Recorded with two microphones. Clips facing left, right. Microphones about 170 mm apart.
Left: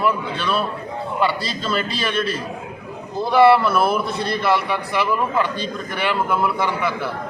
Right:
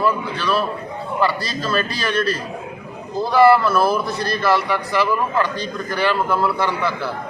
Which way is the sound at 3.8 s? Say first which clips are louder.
Right 1 dB; 25° left (ahead or behind).